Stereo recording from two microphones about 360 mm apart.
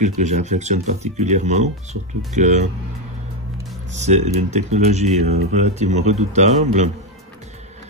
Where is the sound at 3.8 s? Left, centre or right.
Centre.